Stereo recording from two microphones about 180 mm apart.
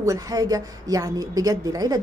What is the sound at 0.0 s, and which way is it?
Speech, 20° right (ahead or behind).